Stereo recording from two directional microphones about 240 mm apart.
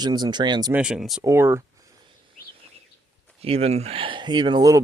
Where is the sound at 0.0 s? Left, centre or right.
Centre.